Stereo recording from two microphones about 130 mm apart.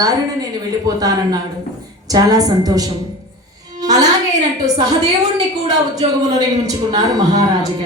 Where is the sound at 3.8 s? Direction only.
30° right (ahead or behind).